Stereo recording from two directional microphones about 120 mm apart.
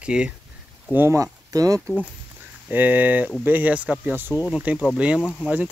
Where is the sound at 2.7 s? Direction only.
15° right (ahead or behind).